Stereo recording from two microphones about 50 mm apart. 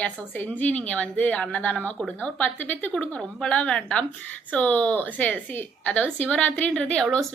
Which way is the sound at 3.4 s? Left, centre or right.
Left.